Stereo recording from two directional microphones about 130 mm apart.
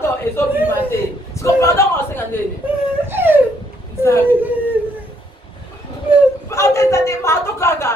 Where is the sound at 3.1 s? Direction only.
15° right (ahead or behind).